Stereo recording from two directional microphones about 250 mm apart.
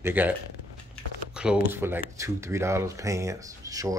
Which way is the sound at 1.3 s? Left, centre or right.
Centre.